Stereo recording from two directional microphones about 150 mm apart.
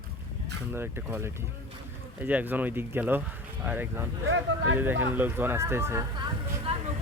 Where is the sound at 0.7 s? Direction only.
15° right (ahead or behind).